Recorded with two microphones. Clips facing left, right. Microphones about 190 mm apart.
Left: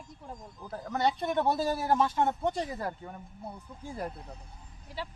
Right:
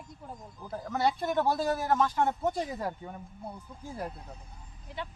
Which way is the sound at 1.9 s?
30° left (ahead or behind).